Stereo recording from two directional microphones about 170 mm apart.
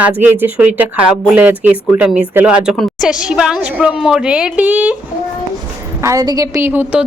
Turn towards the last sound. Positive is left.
turn(degrees=-10)  # may be behind; listen again after turning